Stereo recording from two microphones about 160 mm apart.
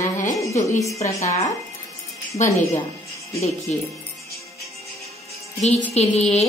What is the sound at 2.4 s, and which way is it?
Speech, 50° left (ahead or behind).